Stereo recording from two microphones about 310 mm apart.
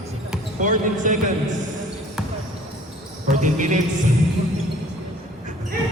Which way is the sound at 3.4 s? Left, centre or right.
Right.